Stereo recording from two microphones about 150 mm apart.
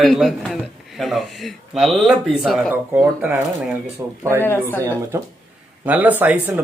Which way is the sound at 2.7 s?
15° right (ahead or behind).